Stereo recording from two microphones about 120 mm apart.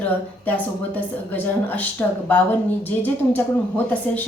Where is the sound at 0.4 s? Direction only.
15° left (ahead or behind).